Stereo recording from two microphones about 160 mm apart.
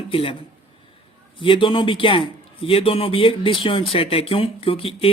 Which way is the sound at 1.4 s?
35° left (ahead or behind).